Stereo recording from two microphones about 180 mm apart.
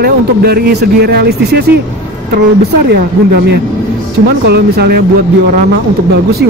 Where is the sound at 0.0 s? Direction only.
60° right (ahead or behind).